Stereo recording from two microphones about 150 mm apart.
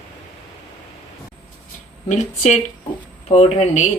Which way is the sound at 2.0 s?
50° left (ahead or behind).